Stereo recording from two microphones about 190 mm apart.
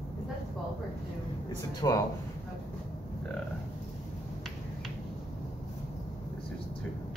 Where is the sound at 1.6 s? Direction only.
20° left (ahead or behind).